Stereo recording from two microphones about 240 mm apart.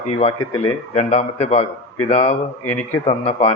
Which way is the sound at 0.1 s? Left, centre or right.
Left.